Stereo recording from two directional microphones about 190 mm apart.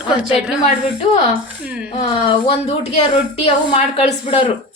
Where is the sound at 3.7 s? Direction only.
35° left (ahead or behind).